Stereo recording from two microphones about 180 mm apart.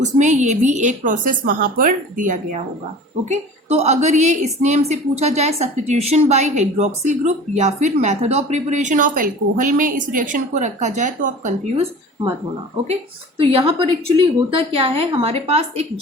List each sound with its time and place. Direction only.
0.0 s a woman's voice: 40° right (ahead or behind)
13.4 s a woman's voice: 30° right (ahead or behind)